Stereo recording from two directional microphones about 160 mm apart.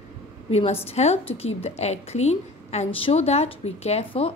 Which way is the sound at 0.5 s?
40° left (ahead or behind).